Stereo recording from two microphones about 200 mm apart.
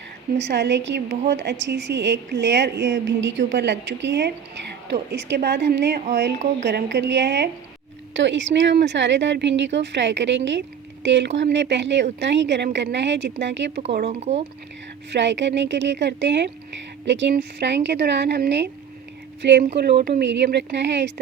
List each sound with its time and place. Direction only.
0.3 s a woman's voice: 60° right (ahead or behind)
14.1 s speech: 35° right (ahead or behind)
15.1 s a woman's voice: 65° right (ahead or behind)